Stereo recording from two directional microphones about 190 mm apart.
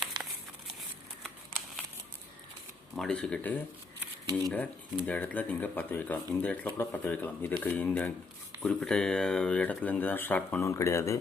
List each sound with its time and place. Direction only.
0.1 s crumpling: 25° right (ahead or behind)
2.9 s speech: 5° left (ahead or behind)